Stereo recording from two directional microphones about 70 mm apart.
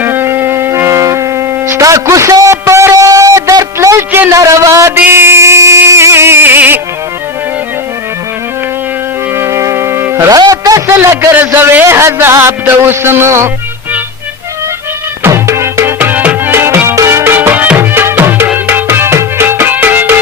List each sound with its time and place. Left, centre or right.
0.0 s music: right
2.3 s a sound: right
2.9 s a sound: right
3.8 s music: right
4.3 s a man's voice: right
4.9 s a sound: right
9.3 s music: right
10.2 s music: right
10.8 s a man's voice: right
11.3 s a man's voice: right
11.9 s speech: right
15.3 s music: right
16.5 s music: right